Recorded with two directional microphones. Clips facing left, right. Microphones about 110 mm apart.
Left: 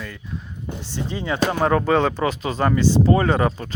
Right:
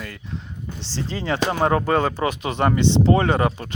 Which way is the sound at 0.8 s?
90° right.